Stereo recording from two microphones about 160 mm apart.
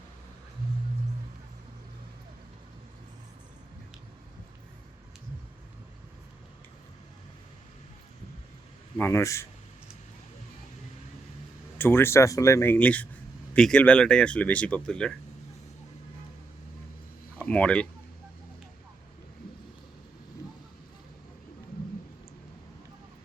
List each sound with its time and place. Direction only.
9.0 s speech: 15° left (ahead or behind)
11.8 s speech: 15° left (ahead or behind)
17.4 s speech: 10° left (ahead or behind)